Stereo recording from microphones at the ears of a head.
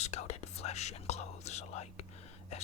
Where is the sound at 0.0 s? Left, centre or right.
Left.